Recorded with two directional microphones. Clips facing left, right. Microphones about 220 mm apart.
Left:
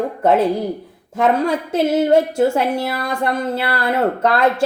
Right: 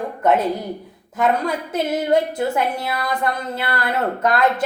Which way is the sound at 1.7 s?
25° left (ahead or behind).